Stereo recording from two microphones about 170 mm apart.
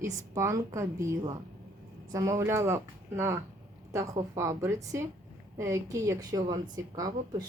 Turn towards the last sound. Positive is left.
turn(degrees=-20)  # may be behind; listen again after turning